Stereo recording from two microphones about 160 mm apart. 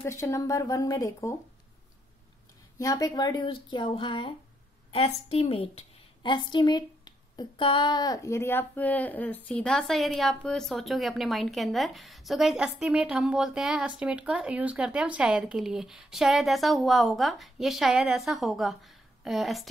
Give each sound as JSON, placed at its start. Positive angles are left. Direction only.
{"t": 0.0, "sound": "speech", "side_deg": 20}
{"t": 2.8, "sound": "a woman's voice", "side_deg": 20}